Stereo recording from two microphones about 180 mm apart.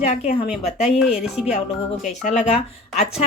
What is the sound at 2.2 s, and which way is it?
Speech, 40° left (ahead or behind).